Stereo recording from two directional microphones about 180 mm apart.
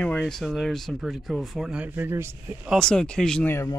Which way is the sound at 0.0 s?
5° left (ahead or behind).